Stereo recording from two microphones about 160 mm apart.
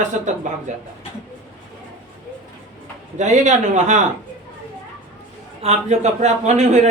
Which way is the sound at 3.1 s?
50° right (ahead or behind).